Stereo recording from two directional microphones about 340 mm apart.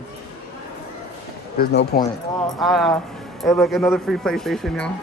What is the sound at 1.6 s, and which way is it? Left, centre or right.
Speech, left.